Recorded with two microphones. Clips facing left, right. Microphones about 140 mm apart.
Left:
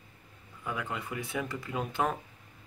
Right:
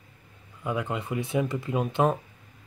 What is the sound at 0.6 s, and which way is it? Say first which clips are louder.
Speech: right 6 dB; 20° right (ahead or behind).